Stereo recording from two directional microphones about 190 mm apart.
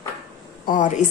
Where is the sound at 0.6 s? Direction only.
40° left (ahead or behind).